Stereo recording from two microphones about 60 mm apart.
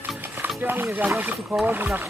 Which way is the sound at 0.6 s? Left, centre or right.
Right.